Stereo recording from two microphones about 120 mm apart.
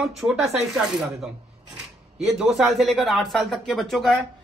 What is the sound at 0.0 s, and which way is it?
Speech, centre (ahead or behind).